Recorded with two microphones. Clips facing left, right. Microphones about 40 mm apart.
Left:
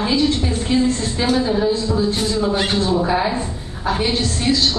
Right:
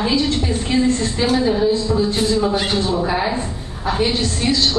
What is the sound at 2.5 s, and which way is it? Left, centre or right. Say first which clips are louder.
Speech: even; centre.